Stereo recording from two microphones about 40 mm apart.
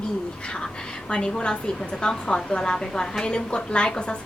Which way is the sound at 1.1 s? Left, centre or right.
Left.